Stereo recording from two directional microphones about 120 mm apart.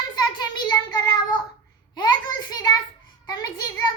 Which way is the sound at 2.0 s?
35° left (ahead or behind).